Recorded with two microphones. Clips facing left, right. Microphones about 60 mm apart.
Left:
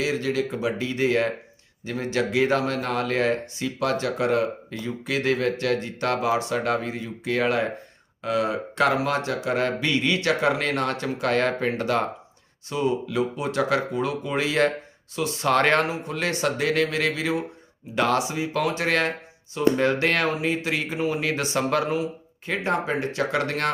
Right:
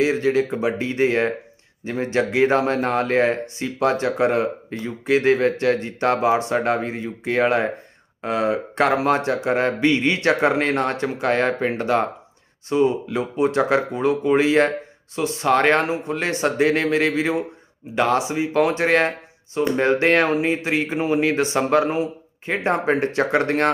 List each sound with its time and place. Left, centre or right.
0.0 s speech: right
15.4 s speech: centre; by 17.4 s right
17.9 s speech: centre